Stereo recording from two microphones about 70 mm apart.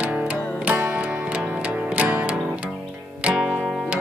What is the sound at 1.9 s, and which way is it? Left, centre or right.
Music, right.